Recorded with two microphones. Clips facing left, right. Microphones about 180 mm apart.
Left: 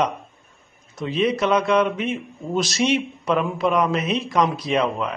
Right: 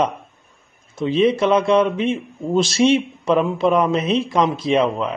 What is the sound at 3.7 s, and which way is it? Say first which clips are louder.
Speech: right 3 dB; centre (ahead or behind).